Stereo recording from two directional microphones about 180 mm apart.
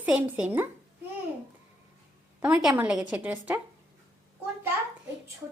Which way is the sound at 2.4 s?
10° right (ahead or behind).